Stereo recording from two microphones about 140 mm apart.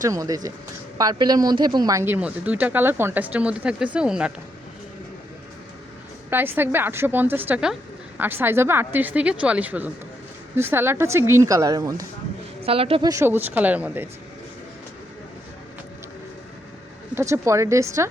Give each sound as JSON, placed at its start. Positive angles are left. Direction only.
{"t": 0.0, "sound": "speech", "side_deg": -25}
{"t": 6.3, "sound": "speech", "side_deg": -15}
{"t": 12.6, "sound": "a woman's voice", "side_deg": -45}
{"t": 13.0, "sound": "speech", "side_deg": -25}
{"t": 17.2, "sound": "speech", "side_deg": -20}